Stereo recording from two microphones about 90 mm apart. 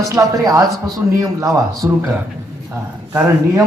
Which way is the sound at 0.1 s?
35° right (ahead or behind).